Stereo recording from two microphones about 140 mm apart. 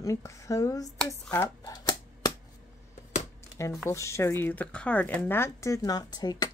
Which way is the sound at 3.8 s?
20° left (ahead or behind).